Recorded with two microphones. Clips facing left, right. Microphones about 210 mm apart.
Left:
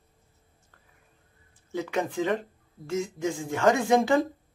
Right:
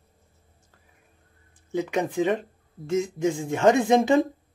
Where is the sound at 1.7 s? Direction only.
20° right (ahead or behind).